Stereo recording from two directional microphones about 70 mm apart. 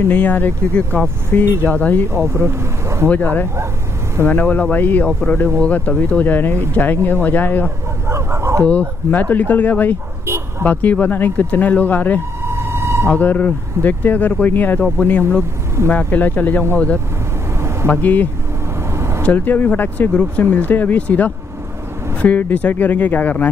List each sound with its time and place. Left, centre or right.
0.1 s speech: left
2.1 s speech: right
3.1 s speech: left
5.0 s speech: centre
8.1 s bow-wow: right
8.6 s speech: left
12.5 s a sound: right
13.1 s speech: left
18.0 s speech: left
18.9 s vehicle: right
19.2 s speech: left